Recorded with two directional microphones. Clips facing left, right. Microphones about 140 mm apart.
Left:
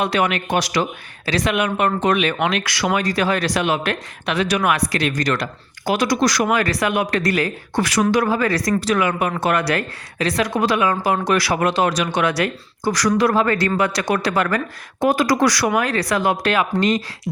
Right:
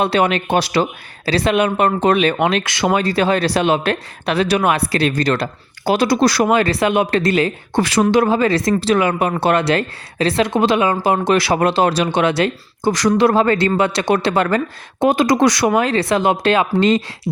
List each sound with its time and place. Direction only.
0.0 s a woman's voice: 30° right (ahead or behind)